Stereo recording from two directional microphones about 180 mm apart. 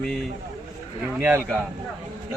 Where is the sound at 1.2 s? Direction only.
10° right (ahead or behind).